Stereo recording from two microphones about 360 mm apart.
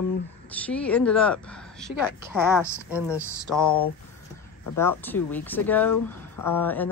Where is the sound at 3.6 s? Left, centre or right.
Left.